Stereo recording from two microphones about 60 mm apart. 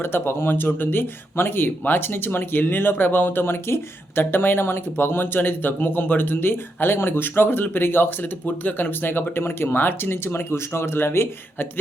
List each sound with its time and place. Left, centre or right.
0.0 s speech: left